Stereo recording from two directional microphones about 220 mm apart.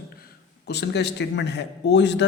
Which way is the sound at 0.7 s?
50° left (ahead or behind).